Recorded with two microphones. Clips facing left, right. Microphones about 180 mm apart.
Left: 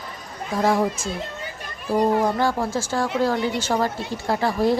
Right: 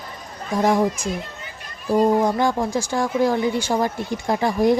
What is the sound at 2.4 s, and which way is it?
A woman's voice, 15° right (ahead or behind).